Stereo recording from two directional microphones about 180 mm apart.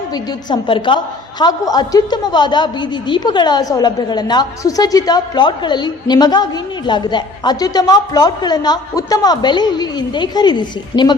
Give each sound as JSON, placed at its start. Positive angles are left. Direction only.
{"t": 0.1, "sound": "a woman's voice", "side_deg": 25}